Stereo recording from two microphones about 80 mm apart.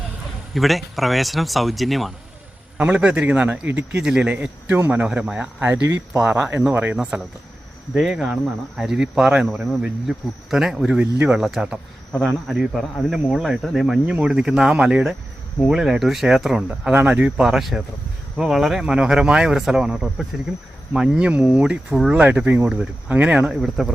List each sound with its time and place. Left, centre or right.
0.5 s speech: centre
2.7 s speech: centre
4.7 s speech: right
6.9 s speech: centre
10.8 s speech: centre
13.0 s speech: centre
16.9 s speech: right
17.5 s speech: centre
23.5 s speech: centre